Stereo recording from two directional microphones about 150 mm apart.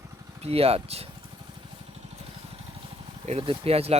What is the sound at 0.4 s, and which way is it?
Speech, 40° right (ahead or behind).